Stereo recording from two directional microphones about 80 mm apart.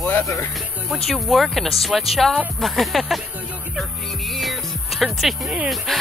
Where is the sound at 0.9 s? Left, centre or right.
Centre.